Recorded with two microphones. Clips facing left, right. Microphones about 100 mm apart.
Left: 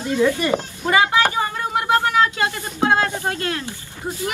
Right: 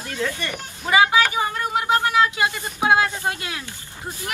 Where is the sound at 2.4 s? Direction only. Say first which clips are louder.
Left 2 dB; 15° right (ahead or behind).